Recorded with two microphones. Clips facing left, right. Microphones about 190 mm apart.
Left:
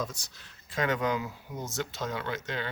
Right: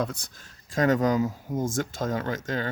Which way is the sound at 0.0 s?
55° right (ahead or behind).